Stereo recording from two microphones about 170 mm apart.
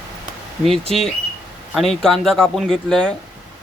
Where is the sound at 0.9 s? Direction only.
Centre (ahead or behind).